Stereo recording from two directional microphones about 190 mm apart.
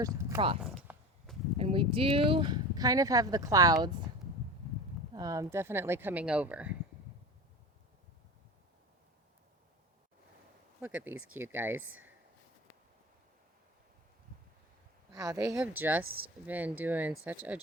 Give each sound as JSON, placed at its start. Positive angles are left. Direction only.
{"t": 0.0, "sound": "speech", "side_deg": -20}
{"t": 0.6, "sound": "a sound", "side_deg": 0}
{"t": 1.5, "sound": "speech", "side_deg": -30}
{"t": 5.1, "sound": "speech", "side_deg": -20}
{"t": 10.8, "sound": "speech", "side_deg": -10}
{"t": 11.1, "sound": "speech", "side_deg": -90}
{"t": 11.3, "sound": "speech", "side_deg": -10}
{"t": 11.8, "sound": "speech", "side_deg": -90}
{"t": 15.1, "sound": "speech", "side_deg": -20}
{"t": 16.0, "sound": "speech", "side_deg": -90}
{"t": 16.5, "sound": "speech", "side_deg": -10}